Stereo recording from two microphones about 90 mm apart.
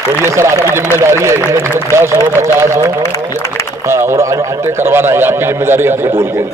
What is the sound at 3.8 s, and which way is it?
A man's voice, 30° right (ahead or behind).